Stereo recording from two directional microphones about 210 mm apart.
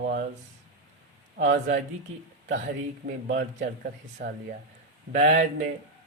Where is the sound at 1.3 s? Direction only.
40° right (ahead or behind).